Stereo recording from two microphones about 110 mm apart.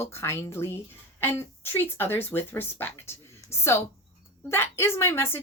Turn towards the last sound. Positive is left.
turn(degrees=20)  # may be behind; listen again after turning